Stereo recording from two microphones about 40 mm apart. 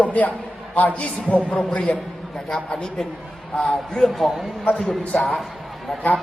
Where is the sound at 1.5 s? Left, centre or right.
Left.